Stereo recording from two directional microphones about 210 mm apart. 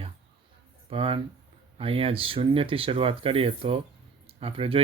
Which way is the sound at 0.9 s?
25° right (ahead or behind).